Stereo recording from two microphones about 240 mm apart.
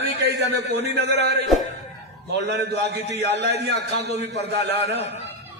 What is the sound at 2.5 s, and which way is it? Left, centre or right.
A man's voice, right.